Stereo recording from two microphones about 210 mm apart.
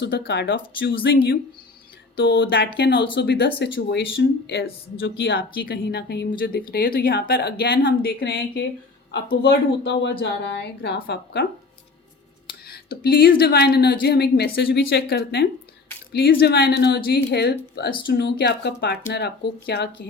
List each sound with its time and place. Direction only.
0.0 s speech: 55° left (ahead or behind)
12.6 s speech: 50° left (ahead or behind)